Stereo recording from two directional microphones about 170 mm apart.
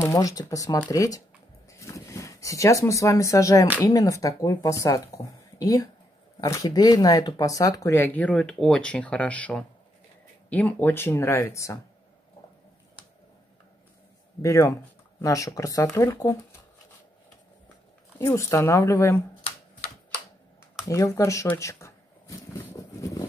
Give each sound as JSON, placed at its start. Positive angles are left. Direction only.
{"t": 0.0, "sound": "speech", "side_deg": 20}
{"t": 1.7, "sound": "a sound", "side_deg": 15}
{"t": 3.8, "sound": "speech", "side_deg": 20}
{"t": 14.4, "sound": "speech", "side_deg": 20}
{"t": 18.2, "sound": "speech", "side_deg": 15}
{"t": 20.9, "sound": "a sound", "side_deg": 20}